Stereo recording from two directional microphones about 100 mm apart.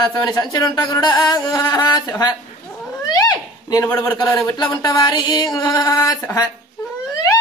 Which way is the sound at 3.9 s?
30° left (ahead or behind).